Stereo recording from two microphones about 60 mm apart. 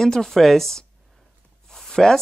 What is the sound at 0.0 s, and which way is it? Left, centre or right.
Speech, centre.